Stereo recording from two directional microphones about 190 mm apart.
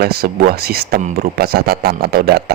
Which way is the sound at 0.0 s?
55° right (ahead or behind).